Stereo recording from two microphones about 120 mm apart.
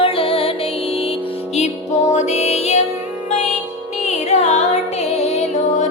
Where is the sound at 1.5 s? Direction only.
70° left (ahead or behind).